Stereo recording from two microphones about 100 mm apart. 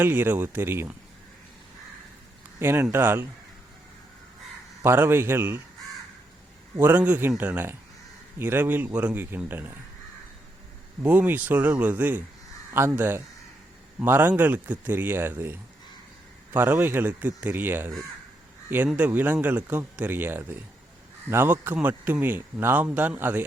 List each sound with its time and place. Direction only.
0.0 s speech: 20° right (ahead or behind)
2.6 s speech: 20° right (ahead or behind)
4.8 s speech: 25° right (ahead or behind)
6.7 s speech: 20° right (ahead or behind)
11.0 s speech: 15° right (ahead or behind)
18.9 s speech: 15° right (ahead or behind)